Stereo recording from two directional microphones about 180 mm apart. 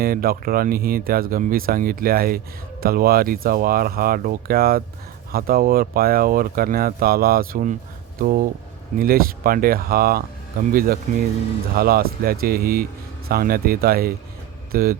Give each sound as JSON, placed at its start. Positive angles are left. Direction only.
{"t": 0.0, "sound": "speech", "side_deg": -55}